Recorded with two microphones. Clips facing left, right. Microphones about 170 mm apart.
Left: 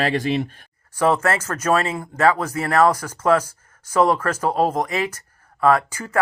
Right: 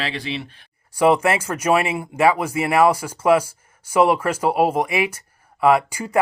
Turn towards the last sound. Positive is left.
turn(degrees=-15)  # may be behind; listen again after turning